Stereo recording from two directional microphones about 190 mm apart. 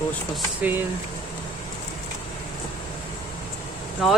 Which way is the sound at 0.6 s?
10° right (ahead or behind).